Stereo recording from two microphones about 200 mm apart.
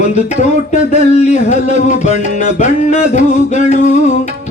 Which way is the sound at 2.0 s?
35° left (ahead or behind).